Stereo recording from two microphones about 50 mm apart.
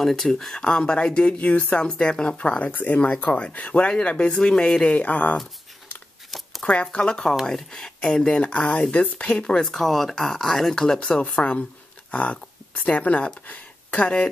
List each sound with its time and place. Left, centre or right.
0.0 s speech: centre
0.6 s speech: centre
1.9 s speech: centre
4.9 s speech: left
6.6 s speech: centre
11.1 s speech: left
13.5 s a sound: left